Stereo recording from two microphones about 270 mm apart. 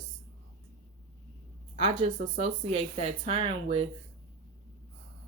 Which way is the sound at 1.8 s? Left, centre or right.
Right.